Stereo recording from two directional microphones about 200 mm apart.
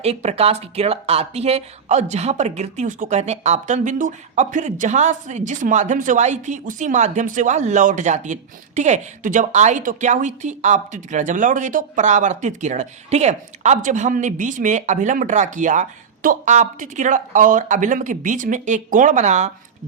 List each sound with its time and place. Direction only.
0.0 s speech: 30° right (ahead or behind)